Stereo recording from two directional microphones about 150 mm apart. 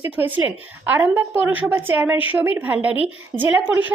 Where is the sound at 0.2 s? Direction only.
10° right (ahead or behind).